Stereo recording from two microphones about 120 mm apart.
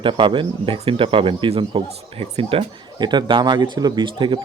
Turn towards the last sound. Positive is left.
turn(degrees=-40)  # may be behind; listen again after turning